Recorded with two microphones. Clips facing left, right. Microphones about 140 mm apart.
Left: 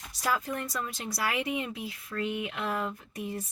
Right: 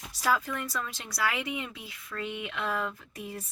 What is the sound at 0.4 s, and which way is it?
Speech, 40° left (ahead or behind).